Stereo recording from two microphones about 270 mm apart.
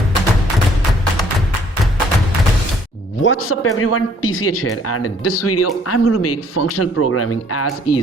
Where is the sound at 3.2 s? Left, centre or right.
Left.